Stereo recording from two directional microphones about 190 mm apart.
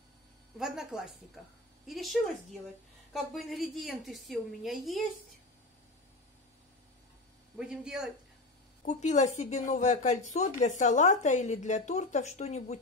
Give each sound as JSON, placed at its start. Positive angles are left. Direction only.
{"t": 0.6, "sound": "a woman's voice", "side_deg": 0}
{"t": 7.5, "sound": "a woman's voice", "side_deg": -5}
{"t": 8.8, "sound": "speech", "side_deg": 40}